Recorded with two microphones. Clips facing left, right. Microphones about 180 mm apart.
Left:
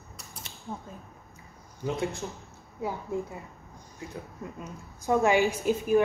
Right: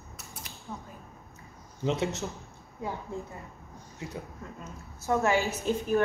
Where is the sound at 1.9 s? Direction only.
20° right (ahead or behind).